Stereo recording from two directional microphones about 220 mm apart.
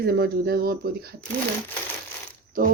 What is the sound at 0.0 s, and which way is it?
Speech, 45° right (ahead or behind).